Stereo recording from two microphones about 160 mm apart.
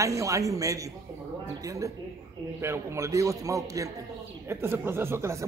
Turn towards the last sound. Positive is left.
turn(degrees=-15)  # may be behind; listen again after turning